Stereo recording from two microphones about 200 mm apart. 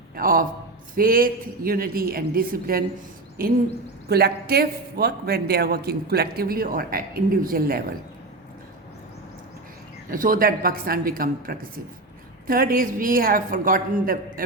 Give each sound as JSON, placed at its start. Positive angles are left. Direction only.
{"t": 0.2, "sound": "a man's voice", "side_deg": -45}
{"t": 10.1, "sound": "a man's voice", "side_deg": -45}